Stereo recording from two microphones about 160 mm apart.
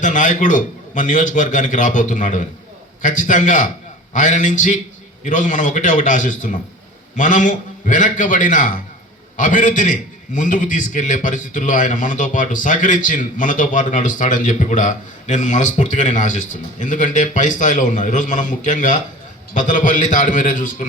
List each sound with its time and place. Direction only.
0.0 s a man's voice: 55° left (ahead or behind)